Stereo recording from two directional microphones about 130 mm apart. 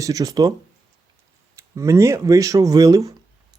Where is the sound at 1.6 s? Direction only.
20° right (ahead or behind).